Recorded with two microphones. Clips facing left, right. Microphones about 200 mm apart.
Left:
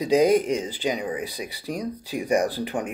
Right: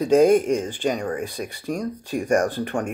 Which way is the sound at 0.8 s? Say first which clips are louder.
Right 2 dB; 5° left (ahead or behind).